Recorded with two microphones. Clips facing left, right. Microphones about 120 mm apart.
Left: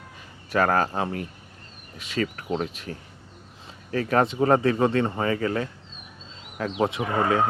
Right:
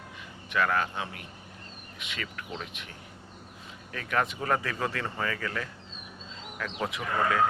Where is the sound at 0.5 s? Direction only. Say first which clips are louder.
Left 6 dB; 40° left (ahead or behind).